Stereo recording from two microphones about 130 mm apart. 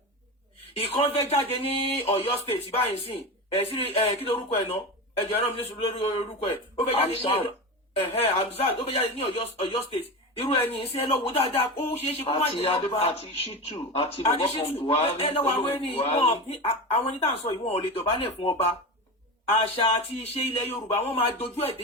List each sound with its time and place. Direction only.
0.8 s speech: 50° left (ahead or behind)